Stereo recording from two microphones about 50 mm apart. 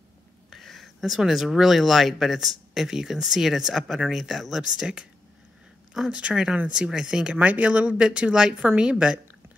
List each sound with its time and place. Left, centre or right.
0.5 s speech: centre
6.1 s speech: centre
7.3 s speech: right